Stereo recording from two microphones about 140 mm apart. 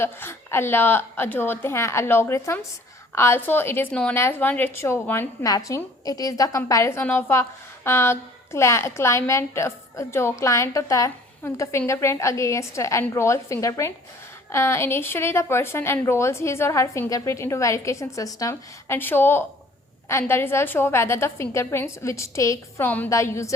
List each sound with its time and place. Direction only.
0.0 s a woman's voice: 15° left (ahead or behind)
5.4 s a woman's voice: 25° left (ahead or behind)